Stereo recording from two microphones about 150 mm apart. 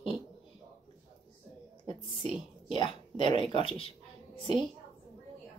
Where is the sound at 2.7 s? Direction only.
35° left (ahead or behind).